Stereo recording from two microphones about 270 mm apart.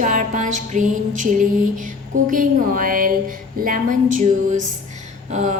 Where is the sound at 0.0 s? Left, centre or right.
Right.